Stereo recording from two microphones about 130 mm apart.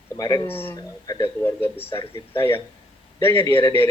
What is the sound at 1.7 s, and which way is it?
Speech, 15° left (ahead or behind).